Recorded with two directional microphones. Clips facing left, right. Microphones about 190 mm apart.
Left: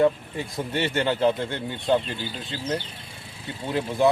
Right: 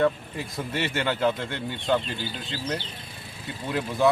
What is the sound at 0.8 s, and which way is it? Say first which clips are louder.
Speech: left 3 dB; 30° left (ahead or behind).